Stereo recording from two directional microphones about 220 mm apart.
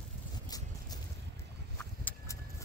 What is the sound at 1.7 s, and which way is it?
Vehicle, 10° left (ahead or behind).